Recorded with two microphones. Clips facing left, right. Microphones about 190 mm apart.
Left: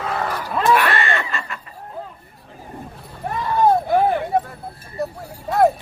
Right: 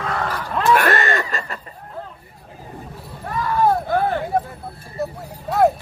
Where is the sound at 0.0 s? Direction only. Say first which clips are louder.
Even; 5° left (ahead or behind).